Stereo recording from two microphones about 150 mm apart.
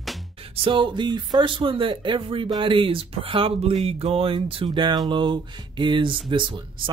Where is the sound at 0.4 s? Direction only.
35° right (ahead or behind).